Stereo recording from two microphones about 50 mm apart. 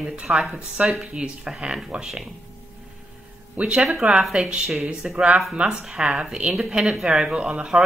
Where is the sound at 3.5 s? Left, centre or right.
Right.